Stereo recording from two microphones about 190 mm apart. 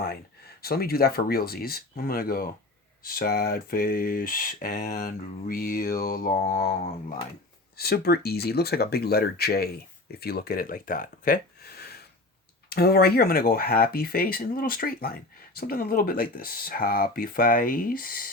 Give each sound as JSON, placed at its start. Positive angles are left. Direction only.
{"t": 0.0, "sound": "speech", "side_deg": 55}
{"t": 7.8, "sound": "speech", "side_deg": 55}